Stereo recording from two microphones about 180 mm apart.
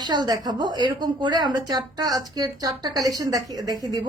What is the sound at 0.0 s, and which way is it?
Speech, 25° right (ahead or behind).